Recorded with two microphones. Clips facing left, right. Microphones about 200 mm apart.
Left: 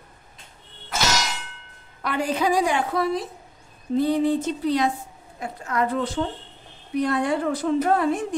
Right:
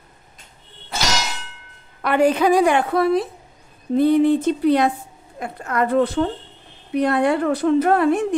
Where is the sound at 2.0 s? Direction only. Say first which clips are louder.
Right 7 dB; 60° right (ahead or behind).